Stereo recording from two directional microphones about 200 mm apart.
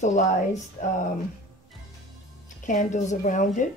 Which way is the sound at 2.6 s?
40° left (ahead or behind).